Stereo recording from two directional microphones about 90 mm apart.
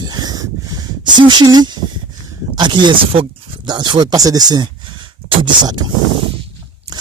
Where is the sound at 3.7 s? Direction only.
55° right (ahead or behind).